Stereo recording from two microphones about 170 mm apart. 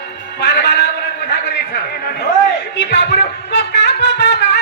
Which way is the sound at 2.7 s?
90° left.